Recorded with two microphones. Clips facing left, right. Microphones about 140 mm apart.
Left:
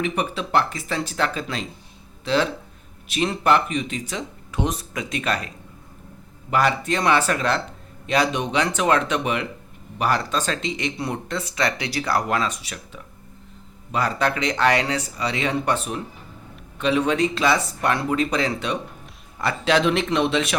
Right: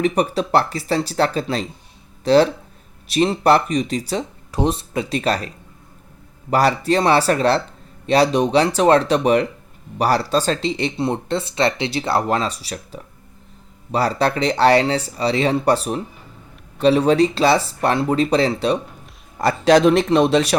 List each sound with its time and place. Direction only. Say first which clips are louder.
0.0 s speech: right 6 dB; 40° right (ahead or behind)
6.5 s speech: right 4 dB; 35° right (ahead or behind)